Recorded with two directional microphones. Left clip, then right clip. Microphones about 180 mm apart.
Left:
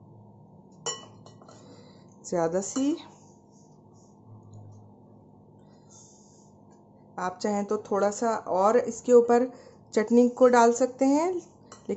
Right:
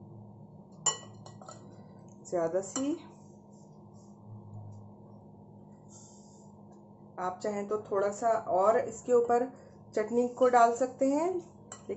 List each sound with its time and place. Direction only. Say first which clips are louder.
2.2 s speech: left 4 dB; 55° left (ahead or behind)
7.2 s speech: left 5 dB; 60° left (ahead or behind)